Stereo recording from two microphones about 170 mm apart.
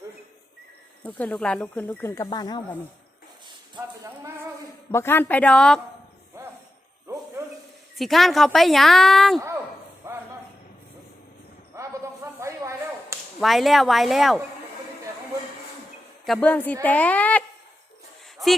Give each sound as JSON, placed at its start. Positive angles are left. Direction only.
{"t": 1.0, "sound": "speech", "side_deg": 10}
{"t": 4.9, "sound": "speech", "side_deg": 15}
{"t": 7.9, "sound": "a woman's voice", "side_deg": 0}
{"t": 10.0, "sound": "a sound", "side_deg": -15}
{"t": 11.7, "sound": "whip", "side_deg": -15}
{"t": 13.4, "sound": "a woman's voice", "side_deg": 0}
{"t": 16.2, "sound": "a woman's voice", "side_deg": 5}
{"t": 18.4, "sound": "a sound", "side_deg": 0}